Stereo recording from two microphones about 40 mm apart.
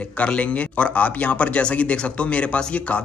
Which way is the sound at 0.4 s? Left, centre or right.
Left.